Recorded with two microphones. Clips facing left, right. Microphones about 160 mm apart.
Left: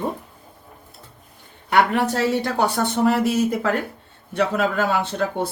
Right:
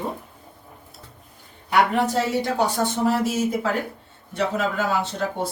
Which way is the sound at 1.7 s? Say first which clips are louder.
Left 1 dB; 65° left (ahead or behind).